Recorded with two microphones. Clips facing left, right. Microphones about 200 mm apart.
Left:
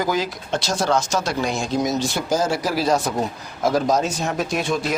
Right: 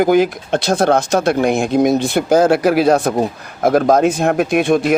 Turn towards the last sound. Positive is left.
turn(degrees=-55)  # may be behind; listen again after turning